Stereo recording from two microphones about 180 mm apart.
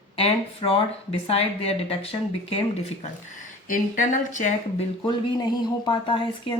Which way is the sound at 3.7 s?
45° left (ahead or behind).